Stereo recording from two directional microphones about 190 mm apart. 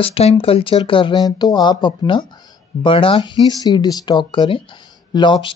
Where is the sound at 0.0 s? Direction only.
30° left (ahead or behind).